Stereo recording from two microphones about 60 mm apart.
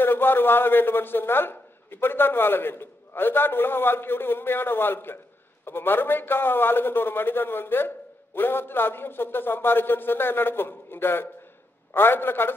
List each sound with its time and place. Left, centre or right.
0.0 s a man's voice: left